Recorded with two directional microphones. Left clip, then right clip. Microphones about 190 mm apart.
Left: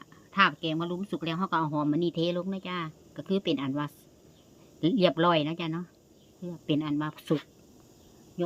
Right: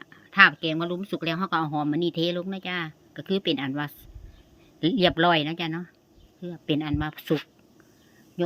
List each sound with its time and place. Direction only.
0.0 s speech: 10° right (ahead or behind)